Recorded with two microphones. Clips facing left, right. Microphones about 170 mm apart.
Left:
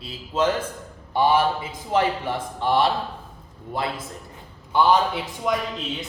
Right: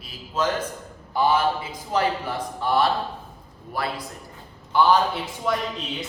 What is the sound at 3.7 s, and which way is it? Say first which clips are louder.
Speech: left 1 dB; 20° left (ahead or behind).